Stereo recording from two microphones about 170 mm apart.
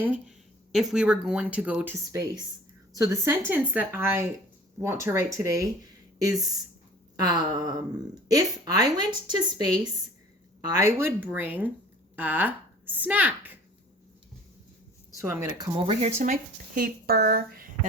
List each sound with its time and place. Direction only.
0.0 s a woman's voice: 5° right (ahead or behind)
15.2 s a woman's voice: 15° right (ahead or behind)
15.5 s speech: 25° right (ahead or behind); by 17.7 s 65° right (ahead or behind)